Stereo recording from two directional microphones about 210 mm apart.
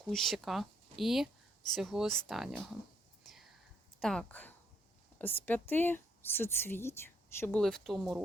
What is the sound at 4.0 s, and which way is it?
Speech, 5° left (ahead or behind).